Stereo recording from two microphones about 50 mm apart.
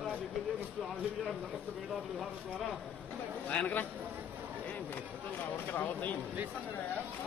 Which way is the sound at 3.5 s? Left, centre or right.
Left.